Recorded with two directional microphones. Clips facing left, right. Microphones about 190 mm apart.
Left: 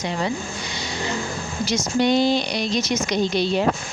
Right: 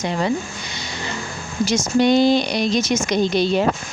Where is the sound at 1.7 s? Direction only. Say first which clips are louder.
Right 3 dB; 50° right (ahead or behind).